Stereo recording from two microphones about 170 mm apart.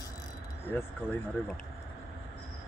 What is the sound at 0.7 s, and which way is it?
Speech, 10° left (ahead or behind).